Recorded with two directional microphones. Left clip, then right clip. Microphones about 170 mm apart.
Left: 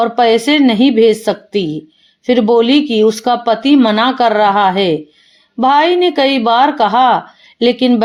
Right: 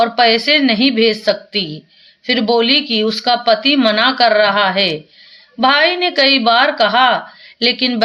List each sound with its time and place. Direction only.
0.0 s speech: 50° left (ahead or behind)